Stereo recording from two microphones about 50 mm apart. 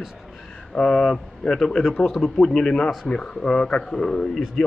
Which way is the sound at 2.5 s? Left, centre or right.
Centre.